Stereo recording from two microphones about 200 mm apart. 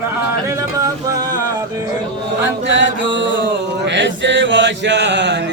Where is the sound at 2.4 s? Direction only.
65° right (ahead or behind).